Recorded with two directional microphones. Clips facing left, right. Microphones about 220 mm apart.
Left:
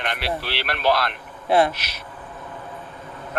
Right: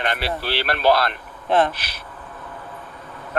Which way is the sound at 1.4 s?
10° left (ahead or behind).